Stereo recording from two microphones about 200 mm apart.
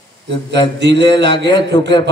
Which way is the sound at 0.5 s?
60° right (ahead or behind).